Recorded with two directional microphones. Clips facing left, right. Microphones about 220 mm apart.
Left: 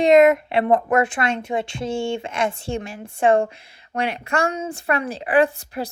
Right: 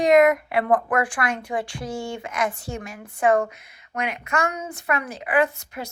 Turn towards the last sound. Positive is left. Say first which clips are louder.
# left 4 dB
turn(degrees=30)  # may be behind; listen again after turning